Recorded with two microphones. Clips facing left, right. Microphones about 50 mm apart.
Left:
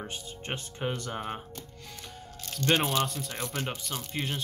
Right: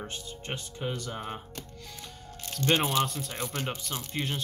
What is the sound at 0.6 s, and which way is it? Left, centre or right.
Speech, left.